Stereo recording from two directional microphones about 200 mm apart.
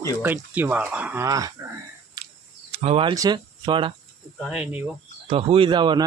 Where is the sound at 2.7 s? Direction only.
30° right (ahead or behind).